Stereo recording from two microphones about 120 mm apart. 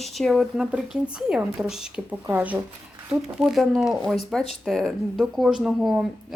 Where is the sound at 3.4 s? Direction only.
Centre (ahead or behind).